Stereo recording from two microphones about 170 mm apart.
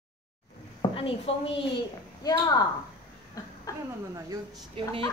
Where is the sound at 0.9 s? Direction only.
35° left (ahead or behind).